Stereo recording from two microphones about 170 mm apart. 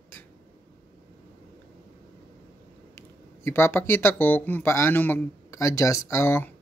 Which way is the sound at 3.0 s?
15° left (ahead or behind).